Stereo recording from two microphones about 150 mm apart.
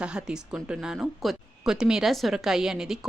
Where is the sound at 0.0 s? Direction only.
5° right (ahead or behind).